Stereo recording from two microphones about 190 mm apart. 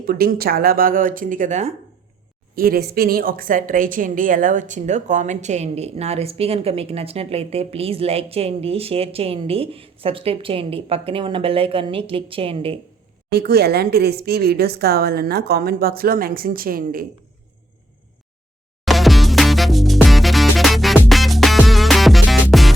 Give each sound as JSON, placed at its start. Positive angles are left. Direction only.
{"t": 0.0, "sound": "speech", "side_deg": -50}
{"t": 2.6, "sound": "a woman's voice", "side_deg": -55}
{"t": 13.3, "sound": "speech", "side_deg": -55}
{"t": 18.9, "sound": "music", "side_deg": 0}